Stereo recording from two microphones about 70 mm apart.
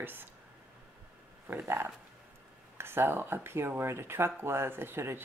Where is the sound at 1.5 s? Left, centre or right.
Right.